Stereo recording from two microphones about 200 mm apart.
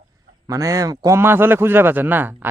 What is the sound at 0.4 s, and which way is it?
A man's voice, 15° right (ahead or behind).